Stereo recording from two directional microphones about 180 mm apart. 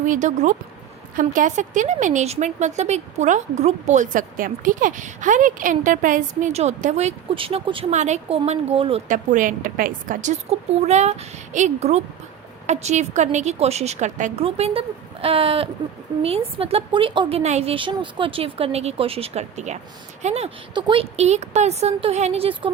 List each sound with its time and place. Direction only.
0.0 s a woman's voice: 45° right (ahead or behind)
9.0 s a woman's voice: 45° right (ahead or behind)